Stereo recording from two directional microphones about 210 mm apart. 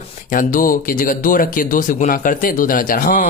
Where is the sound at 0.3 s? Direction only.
40° left (ahead or behind).